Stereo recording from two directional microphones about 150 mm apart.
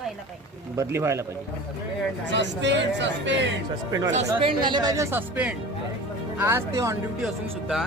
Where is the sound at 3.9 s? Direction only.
25° right (ahead or behind).